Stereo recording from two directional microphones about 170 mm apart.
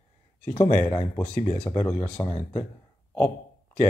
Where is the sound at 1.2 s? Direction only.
45° left (ahead or behind).